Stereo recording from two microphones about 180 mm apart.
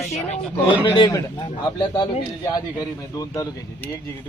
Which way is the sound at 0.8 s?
25° left (ahead or behind).